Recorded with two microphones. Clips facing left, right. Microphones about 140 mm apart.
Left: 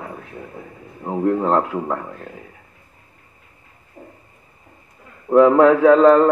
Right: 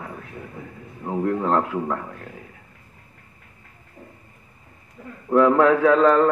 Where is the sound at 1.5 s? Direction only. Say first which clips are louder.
Left 3 dB; 10° left (ahead or behind).